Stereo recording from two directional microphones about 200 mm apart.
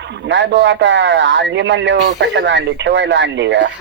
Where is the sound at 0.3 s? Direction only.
65° right (ahead or behind).